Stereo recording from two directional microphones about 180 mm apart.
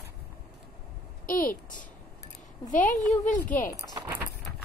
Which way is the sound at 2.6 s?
45° left (ahead or behind).